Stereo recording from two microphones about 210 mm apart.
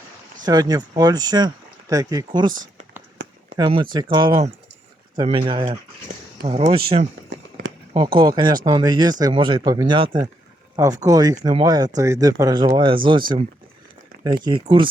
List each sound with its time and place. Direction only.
0.4 s speech: 20° right (ahead or behind)
3.5 s speech: 25° right (ahead or behind)
7.9 s speech: 20° right (ahead or behind)